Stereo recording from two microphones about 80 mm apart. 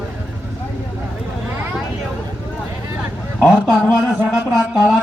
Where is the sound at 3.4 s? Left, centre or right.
Centre.